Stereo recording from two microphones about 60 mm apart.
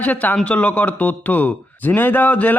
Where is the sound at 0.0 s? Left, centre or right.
Left.